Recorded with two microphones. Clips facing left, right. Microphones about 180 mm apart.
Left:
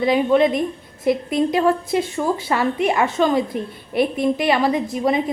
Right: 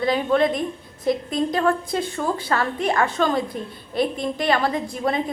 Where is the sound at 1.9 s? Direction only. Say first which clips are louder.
Left 4 dB; 25° left (ahead or behind).